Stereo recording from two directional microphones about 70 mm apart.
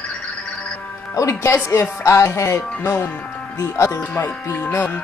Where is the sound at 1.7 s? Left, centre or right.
Left.